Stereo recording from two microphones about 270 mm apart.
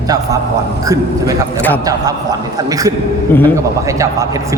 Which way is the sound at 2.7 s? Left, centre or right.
Centre.